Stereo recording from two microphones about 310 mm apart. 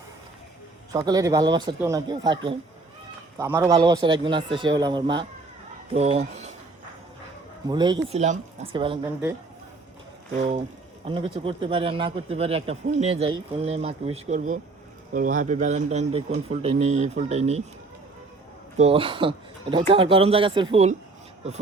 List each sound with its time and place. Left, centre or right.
0.9 s speech: centre
7.7 s speech: centre
10.3 s speech: right
11.0 s speech: centre
18.8 s speech: centre